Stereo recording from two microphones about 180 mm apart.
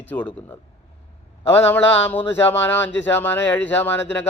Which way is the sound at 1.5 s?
10° left (ahead or behind).